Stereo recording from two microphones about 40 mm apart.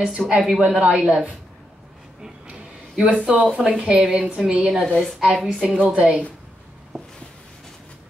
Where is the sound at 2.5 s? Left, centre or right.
Right.